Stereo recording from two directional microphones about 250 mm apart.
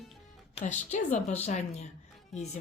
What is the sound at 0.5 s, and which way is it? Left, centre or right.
A woman's voice, left.